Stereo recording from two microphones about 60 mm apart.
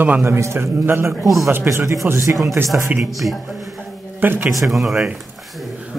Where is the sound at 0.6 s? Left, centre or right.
Right.